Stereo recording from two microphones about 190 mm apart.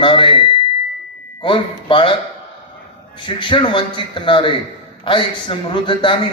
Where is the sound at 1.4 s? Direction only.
25° left (ahead or behind).